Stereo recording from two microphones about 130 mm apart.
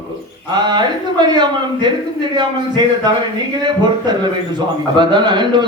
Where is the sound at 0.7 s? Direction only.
35° right (ahead or behind).